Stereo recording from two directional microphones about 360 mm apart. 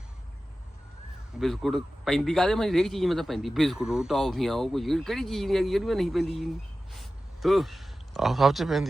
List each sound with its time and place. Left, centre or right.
1.4 s speech: centre